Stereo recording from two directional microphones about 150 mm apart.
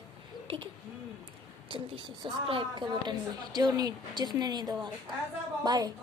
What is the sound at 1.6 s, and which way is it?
A woman's voice, 35° right (ahead or behind).